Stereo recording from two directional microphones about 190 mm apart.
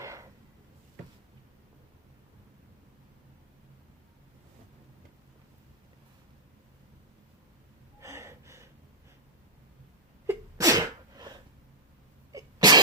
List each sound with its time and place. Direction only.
0.0 s a sound: 15° right (ahead or behind)
8.0 s gasp: 15° right (ahead or behind)
10.2 s sneeze: 15° right (ahead or behind)